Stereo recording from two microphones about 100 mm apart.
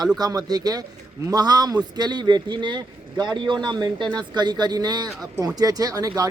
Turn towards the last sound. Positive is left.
turn(degrees=-40)  # may be behind; listen again after turning